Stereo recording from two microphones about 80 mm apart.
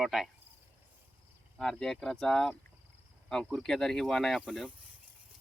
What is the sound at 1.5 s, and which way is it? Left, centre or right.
Speech, centre.